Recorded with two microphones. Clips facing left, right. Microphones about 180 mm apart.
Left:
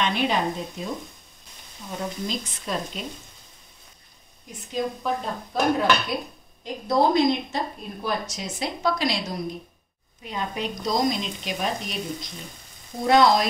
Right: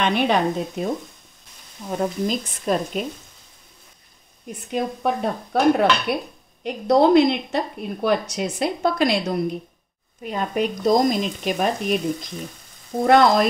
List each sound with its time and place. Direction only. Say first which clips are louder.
0.0 s a woman's voice: right 4 dB; 60° right (ahead or behind)
1.9 s speech: right 7 dB; 50° right (ahead or behind)
4.5 s a woman's voice: right 3 dB; 60° right (ahead or behind)